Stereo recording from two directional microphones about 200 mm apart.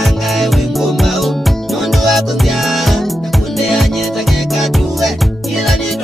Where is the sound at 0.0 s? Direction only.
Centre (ahead or behind).